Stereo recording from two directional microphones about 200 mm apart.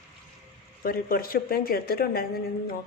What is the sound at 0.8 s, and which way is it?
A woman's voice, 45° left (ahead or behind).